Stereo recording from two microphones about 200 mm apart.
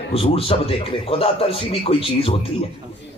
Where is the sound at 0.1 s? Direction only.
30° left (ahead or behind).